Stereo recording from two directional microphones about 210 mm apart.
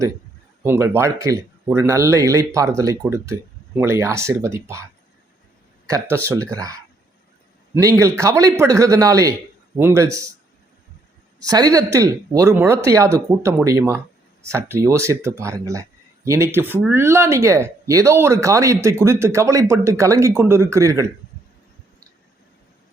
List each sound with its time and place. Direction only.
0.6 s speech: 10° right (ahead or behind)
5.9 s speech: 15° right (ahead or behind)
11.3 s speech: 15° right (ahead or behind)